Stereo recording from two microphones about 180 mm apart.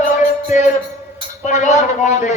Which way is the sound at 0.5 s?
45° left (ahead or behind).